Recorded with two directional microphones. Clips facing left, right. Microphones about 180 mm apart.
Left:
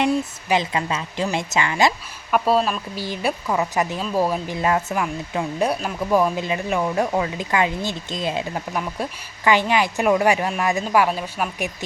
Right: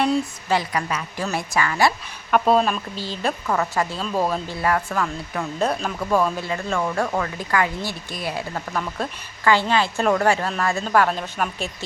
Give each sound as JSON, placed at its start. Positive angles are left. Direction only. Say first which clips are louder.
{"t": 0.0, "sound": "a woman's voice", "louder": "even", "side_deg": 15}
{"t": 2.3, "sound": "speech", "louder": "right 1 dB", "side_deg": 5}
{"t": 3.0, "sound": "speech", "louder": "left 4 dB", "side_deg": 10}